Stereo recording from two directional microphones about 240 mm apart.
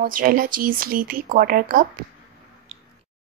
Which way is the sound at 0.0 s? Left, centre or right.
Right.